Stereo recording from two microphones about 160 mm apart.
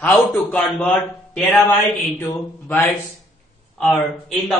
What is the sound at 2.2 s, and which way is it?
Speech, 15° left (ahead or behind).